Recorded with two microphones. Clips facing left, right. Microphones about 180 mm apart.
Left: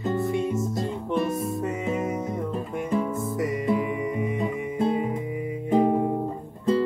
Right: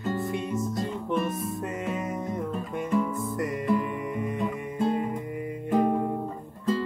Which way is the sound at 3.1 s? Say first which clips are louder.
Left 2 dB; 20° left (ahead or behind).